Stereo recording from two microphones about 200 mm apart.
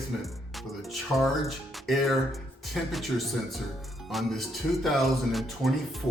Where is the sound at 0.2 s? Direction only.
Centre (ahead or behind).